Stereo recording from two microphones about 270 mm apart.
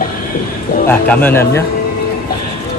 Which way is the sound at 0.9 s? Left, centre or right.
Centre.